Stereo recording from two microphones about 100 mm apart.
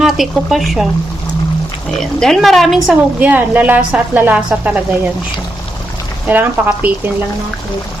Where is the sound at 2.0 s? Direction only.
5° left (ahead or behind).